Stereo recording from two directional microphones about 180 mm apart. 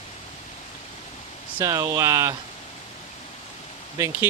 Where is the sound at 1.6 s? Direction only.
15° right (ahead or behind).